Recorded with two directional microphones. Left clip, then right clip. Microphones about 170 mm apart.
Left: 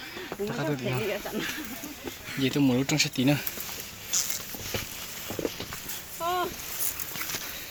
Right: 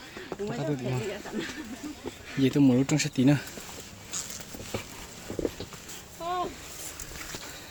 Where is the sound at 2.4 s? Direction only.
35° right (ahead or behind).